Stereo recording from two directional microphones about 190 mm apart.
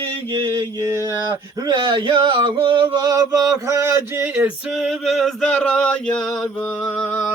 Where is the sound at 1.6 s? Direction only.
20° right (ahead or behind); by 7.2 s 5° left (ahead or behind).